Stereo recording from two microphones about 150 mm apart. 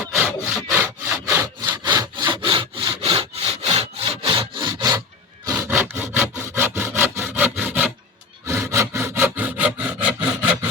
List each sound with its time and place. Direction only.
0.2 s sawing: 10° right (ahead or behind)
1.8 s sawing: 30° right (ahead or behind)
5.5 s sawing: 10° right (ahead or behind)
8.4 s a sound: 15° right (ahead or behind)